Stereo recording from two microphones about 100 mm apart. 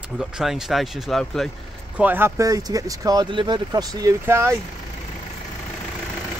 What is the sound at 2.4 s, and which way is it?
Speech, 35° right (ahead or behind).